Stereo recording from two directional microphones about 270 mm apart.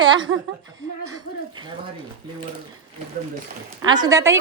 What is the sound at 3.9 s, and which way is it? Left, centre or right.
Speech, centre.